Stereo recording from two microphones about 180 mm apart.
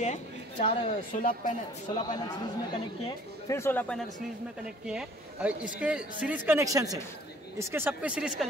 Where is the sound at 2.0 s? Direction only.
20° left (ahead or behind).